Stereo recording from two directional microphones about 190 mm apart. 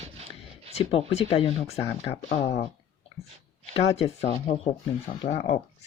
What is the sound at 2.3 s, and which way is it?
Speech, 45° left (ahead or behind).